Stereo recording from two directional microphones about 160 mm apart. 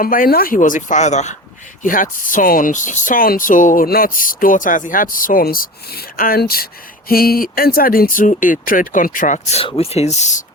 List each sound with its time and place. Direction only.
0.0 s speech: 60° left (ahead or behind); by 1.4 s 45° left (ahead or behind)
1.8 s speech: 55° left (ahead or behind)